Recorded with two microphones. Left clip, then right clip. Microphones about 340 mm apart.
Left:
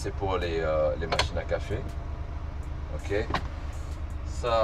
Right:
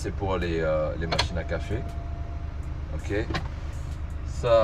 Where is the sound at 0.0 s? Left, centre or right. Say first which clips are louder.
Right 1 dB; left.